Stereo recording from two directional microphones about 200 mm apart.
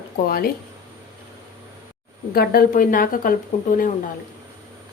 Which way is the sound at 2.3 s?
45° left (ahead or behind).